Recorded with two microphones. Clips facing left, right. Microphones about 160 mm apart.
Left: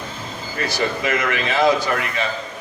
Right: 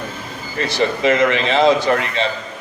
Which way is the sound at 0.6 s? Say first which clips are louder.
Right 5 dB; 25° right (ahead or behind).